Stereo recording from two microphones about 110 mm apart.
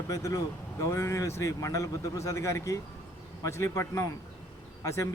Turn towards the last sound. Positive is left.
turn(degrees=30)  # may be behind; listen again after turning